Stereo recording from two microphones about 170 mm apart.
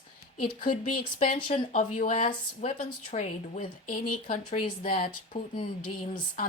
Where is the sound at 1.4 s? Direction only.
30° left (ahead or behind).